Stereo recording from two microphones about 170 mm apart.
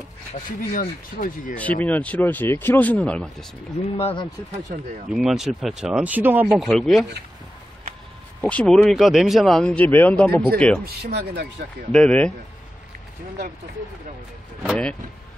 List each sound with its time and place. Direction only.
0.6 s speech: 50° left (ahead or behind)
1.6 s speech: 10° left (ahead or behind)
3.9 s speech: 30° left (ahead or behind)
5.1 s speech: centre (ahead or behind)
6.4 s speech: centre (ahead or behind)
8.4 s speech: 5° left (ahead or behind)
10.9 s speech: 70° right (ahead or behind)
11.9 s speech: 5° left (ahead or behind)
14.7 s speech: 5° left (ahead or behind)